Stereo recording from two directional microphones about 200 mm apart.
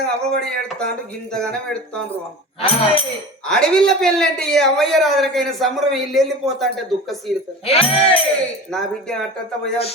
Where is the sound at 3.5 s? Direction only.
5° left (ahead or behind).